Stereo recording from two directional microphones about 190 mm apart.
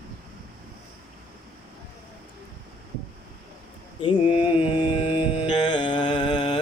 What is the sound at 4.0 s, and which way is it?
Mantra, 25° left (ahead or behind).